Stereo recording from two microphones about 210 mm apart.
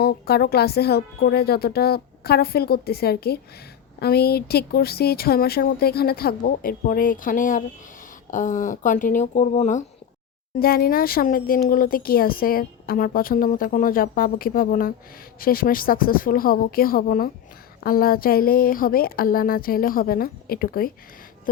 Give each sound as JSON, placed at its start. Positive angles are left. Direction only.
{"t": 0.0, "sound": "speech", "side_deg": 50}
{"t": 10.6, "sound": "speech", "side_deg": 45}